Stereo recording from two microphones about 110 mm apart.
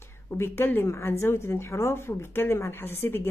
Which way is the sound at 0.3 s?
20° left (ahead or behind).